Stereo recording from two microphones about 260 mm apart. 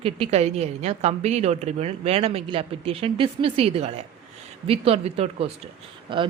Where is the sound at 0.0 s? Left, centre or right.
Right.